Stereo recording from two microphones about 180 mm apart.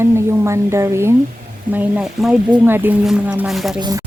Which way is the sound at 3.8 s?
20° right (ahead or behind).